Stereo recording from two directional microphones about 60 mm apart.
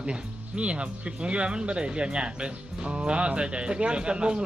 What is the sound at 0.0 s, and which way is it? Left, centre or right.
Speech, centre.